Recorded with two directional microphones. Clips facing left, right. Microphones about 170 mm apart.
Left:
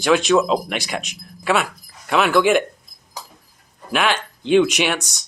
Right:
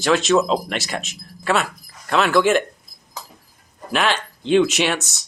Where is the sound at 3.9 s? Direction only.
5° left (ahead or behind).